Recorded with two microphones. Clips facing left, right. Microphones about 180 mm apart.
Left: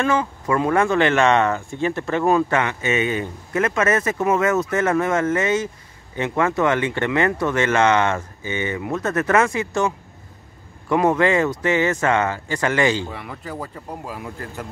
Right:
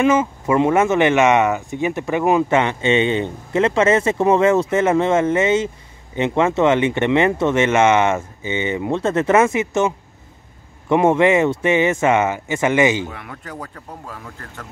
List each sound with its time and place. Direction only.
0.0 s speech: 20° right (ahead or behind)
13.1 s speech: centre (ahead or behind)